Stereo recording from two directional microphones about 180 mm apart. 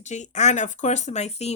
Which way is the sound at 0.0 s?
40° left (ahead or behind).